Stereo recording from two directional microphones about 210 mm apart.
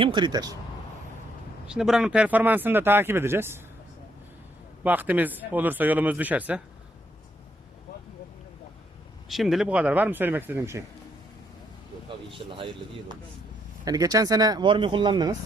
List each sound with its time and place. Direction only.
0.0 s speech: 20° right (ahead or behind)
1.6 s speech: 5° right (ahead or behind)
4.8 s speech: 5° right (ahead or behind)
9.3 s speech: centre (ahead or behind)
12.0 s speech: 25° right (ahead or behind)